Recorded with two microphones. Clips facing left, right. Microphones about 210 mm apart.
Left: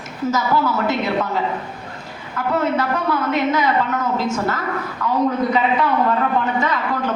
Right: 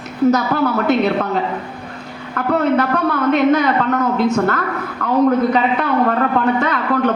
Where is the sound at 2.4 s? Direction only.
60° right (ahead or behind).